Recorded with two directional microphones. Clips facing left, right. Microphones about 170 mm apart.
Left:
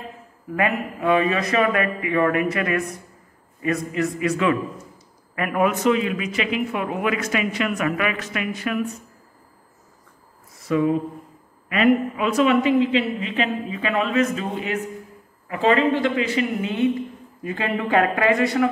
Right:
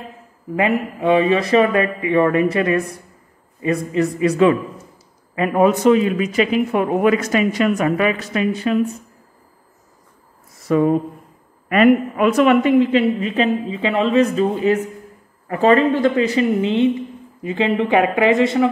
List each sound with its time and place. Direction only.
0.6 s a man's voice: 25° right (ahead or behind)
10.7 s a woman's voice: 45° right (ahead or behind)
13.7 s a man's voice: 25° right (ahead or behind)
16.6 s speech: 25° right (ahead or behind)